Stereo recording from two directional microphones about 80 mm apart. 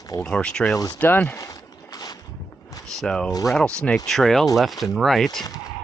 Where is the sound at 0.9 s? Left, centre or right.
Left.